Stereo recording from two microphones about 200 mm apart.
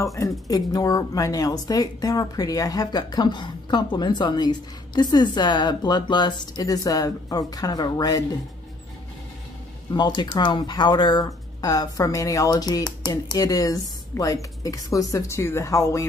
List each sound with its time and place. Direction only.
0.0 s speech: 15° left (ahead or behind)
9.9 s speech: 20° left (ahead or behind)